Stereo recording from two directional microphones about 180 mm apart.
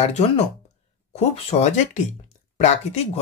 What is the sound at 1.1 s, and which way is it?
Speech, 35° left (ahead or behind).